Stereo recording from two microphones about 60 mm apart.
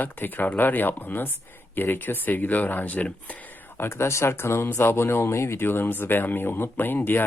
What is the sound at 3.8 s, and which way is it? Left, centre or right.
Speech, left.